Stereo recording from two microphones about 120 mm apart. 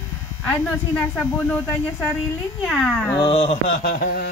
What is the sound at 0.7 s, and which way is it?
Speech, 20° left (ahead or behind).